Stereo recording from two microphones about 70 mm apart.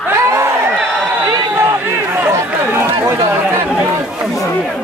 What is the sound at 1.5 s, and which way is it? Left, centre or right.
Speech, right.